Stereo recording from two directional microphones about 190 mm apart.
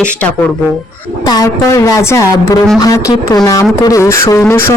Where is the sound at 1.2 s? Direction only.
20° left (ahead or behind).